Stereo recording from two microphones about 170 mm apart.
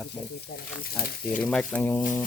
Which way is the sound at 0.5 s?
70° left (ahead or behind).